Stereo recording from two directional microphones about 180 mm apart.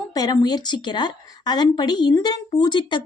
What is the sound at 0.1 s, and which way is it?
A woman's voice, 20° left (ahead or behind).